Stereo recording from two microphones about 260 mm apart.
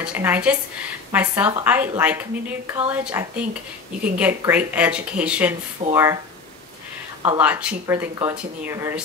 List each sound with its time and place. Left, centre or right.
0.0 s speech: centre
5.8 s speech: right
7.2 s speech: centre